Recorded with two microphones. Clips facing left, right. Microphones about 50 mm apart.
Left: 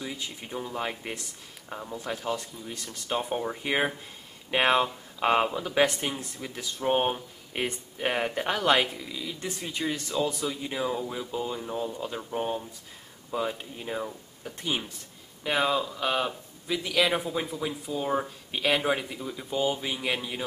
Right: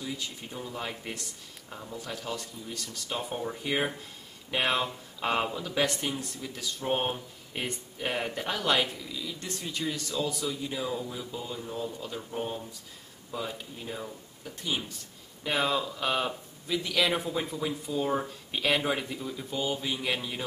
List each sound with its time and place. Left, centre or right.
0.0 s speech: left
15.4 s speech: centre